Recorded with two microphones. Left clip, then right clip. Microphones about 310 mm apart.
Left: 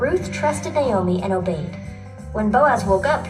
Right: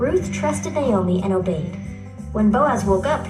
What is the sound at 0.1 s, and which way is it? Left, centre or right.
A woman's voice, left.